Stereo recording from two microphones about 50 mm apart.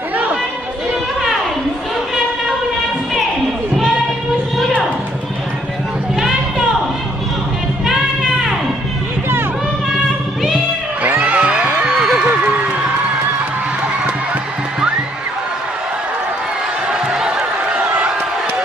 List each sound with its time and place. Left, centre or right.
8.2 s music: centre
10.0 s music: centre
11.1 s music: right
12.0 s music: centre
12.3 s a sound: right
17.1 s a sound: centre